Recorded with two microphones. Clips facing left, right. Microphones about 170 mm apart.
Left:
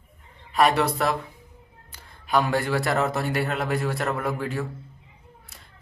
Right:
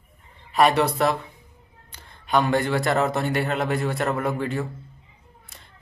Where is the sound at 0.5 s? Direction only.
Centre (ahead or behind).